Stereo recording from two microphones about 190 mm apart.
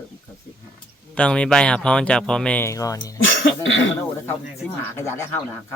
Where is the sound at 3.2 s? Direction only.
90° left.